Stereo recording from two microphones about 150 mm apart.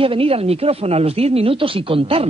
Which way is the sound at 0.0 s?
40° right (ahead or behind).